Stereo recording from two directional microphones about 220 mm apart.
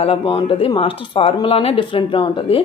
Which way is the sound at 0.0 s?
25° left (ahead or behind).